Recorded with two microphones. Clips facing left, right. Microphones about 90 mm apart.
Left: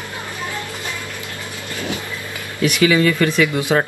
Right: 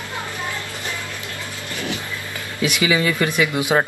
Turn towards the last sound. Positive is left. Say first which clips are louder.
# left 2 dB
turn(degrees=-15)  # may be behind; listen again after turning